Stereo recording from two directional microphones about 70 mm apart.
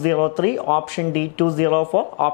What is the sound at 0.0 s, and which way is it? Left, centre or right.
A man's voice, left.